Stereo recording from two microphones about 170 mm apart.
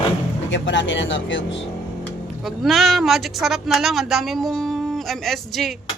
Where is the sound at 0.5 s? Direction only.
90° left.